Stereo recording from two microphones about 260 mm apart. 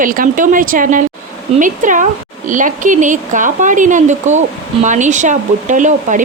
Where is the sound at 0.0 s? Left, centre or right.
Right.